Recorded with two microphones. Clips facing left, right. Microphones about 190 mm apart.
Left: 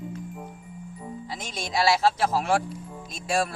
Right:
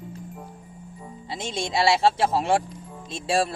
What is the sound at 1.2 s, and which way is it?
Speech, 25° right (ahead or behind).